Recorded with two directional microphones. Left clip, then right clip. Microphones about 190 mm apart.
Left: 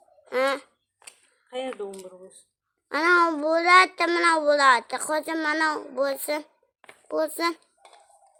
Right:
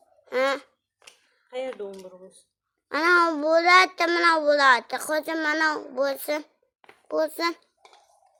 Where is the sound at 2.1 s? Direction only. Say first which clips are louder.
Even; 20° left (ahead or behind).